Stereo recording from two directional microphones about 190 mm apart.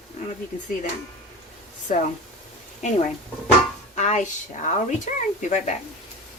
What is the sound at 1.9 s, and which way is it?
Speech, 40° left (ahead or behind).